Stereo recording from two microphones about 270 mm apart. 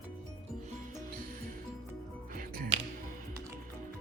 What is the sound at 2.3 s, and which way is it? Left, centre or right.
Music, right.